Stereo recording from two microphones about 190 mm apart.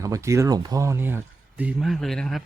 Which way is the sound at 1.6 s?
Centre (ahead or behind).